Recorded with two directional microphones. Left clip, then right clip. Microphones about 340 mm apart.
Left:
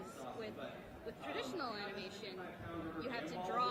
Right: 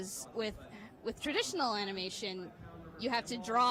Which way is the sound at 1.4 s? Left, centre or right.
Right.